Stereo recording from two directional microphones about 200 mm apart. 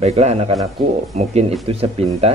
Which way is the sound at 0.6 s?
Centre (ahead or behind).